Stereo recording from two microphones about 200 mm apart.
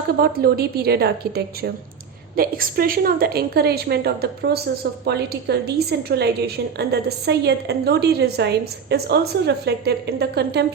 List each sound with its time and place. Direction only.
0.2 s a woman's voice: 50° right (ahead or behind)